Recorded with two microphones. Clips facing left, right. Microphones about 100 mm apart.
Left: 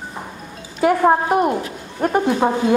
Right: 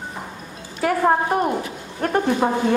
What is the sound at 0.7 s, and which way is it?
A woman's voice, 20° left (ahead or behind).